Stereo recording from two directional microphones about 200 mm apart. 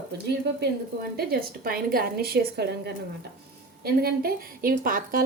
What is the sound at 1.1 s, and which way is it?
A woman's voice, 50° right (ahead or behind).